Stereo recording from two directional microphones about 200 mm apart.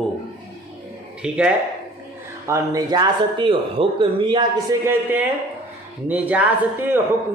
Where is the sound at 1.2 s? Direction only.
5° right (ahead or behind).